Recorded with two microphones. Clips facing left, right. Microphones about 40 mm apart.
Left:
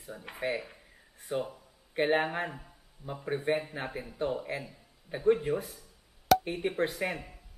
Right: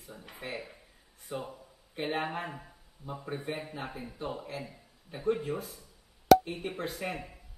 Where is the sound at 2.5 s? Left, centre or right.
Centre.